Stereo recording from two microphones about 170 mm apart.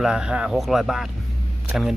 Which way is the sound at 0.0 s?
5° right (ahead or behind).